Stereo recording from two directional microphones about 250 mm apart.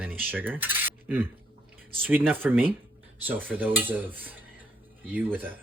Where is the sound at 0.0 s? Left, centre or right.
Centre.